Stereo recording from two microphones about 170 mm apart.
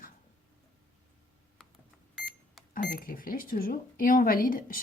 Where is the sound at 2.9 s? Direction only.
60° left (ahead or behind).